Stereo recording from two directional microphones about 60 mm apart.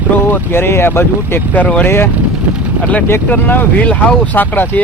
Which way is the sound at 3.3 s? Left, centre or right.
Left.